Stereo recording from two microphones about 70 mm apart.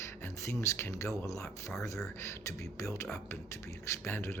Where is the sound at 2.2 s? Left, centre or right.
Left.